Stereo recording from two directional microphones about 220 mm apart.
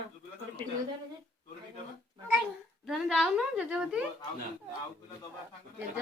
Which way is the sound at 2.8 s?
Centre (ahead or behind).